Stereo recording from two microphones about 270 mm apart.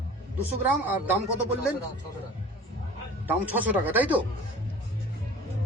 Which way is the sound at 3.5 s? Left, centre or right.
Centre.